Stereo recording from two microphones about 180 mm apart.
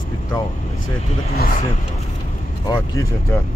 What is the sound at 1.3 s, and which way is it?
Speech, 55° left (ahead or behind).